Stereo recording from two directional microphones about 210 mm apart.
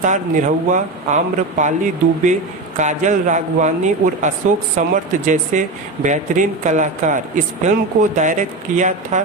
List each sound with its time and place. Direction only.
0.0 s speech: 35° right (ahead or behind)